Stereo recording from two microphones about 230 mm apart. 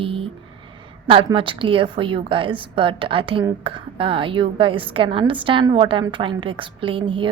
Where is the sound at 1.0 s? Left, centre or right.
Right.